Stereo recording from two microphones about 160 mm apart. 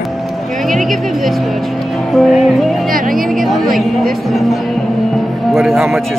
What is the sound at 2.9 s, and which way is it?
Music, 60° right (ahead or behind).